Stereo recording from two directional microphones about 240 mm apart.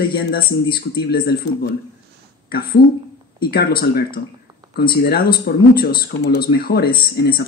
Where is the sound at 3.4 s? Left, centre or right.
Left.